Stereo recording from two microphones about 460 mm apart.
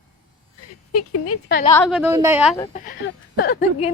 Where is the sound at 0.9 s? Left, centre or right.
Left.